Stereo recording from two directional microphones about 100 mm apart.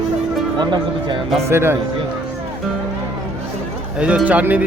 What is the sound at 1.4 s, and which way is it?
Speech, 25° right (ahead or behind).